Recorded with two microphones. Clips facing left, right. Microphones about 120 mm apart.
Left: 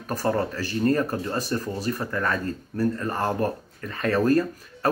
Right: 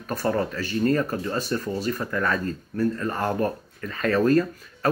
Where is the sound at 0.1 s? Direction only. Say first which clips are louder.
Even; 35° left (ahead or behind).